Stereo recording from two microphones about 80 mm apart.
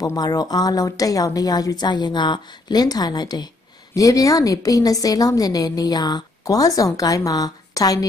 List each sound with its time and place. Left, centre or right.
0.0 s a woman's voice: left
3.9 s a woman's voice: left